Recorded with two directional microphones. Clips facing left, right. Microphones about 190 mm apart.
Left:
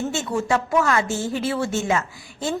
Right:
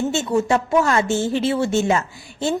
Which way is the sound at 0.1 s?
25° right (ahead or behind).